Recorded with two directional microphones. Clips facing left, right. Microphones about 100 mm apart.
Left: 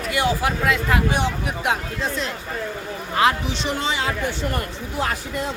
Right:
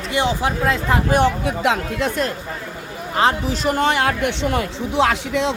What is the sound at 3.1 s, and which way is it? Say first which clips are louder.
Speech: right 2 dB; 30° right (ahead or behind).